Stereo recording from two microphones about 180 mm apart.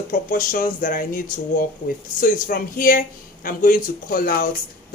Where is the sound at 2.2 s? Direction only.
50° left (ahead or behind).